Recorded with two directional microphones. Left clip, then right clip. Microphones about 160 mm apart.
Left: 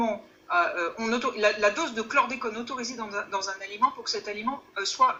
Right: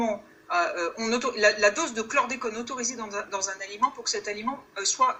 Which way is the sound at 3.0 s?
20° right (ahead or behind).